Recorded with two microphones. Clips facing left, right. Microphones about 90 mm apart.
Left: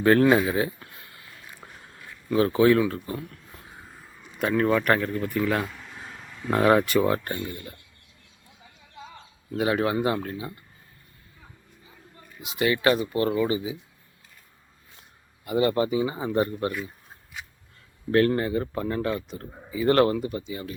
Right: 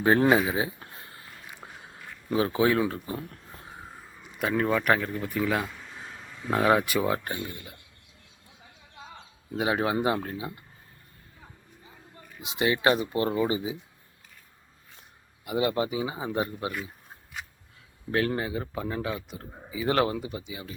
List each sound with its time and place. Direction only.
0.0 s speech: 20° right (ahead or behind)
0.8 s a sound: 30° right (ahead or behind)
1.5 s a sound: 15° right (ahead or behind)
2.9 s speech: 20° right (ahead or behind)
3.2 s a sound: 35° right (ahead or behind)
4.4 s speech: 5° right (ahead or behind)
9.5 s speech: 20° right (ahead or behind)
12.4 s speech: 25° right (ahead or behind)
15.4 s speech: 10° right (ahead or behind)
18.1 s speech: 5° right (ahead or behind)